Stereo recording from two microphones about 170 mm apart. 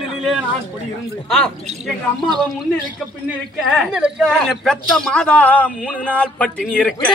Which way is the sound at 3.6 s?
Centre (ahead or behind).